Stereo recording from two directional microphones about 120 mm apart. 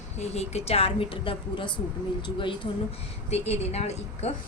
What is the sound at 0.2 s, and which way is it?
Speech, 65° left (ahead or behind).